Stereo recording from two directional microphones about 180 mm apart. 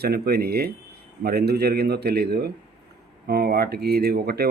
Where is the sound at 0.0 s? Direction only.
60° right (ahead or behind).